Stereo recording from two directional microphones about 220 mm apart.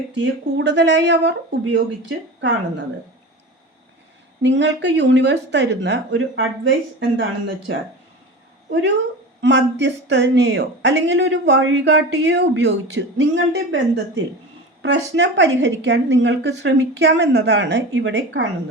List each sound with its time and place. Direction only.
0.6 s speech: 55° right (ahead or behind)
4.4 s speech: 55° right (ahead or behind)
9.4 s speech: 55° right (ahead or behind)